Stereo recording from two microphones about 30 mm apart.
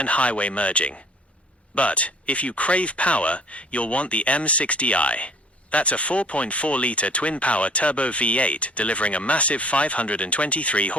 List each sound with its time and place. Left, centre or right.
0.0 s speech: left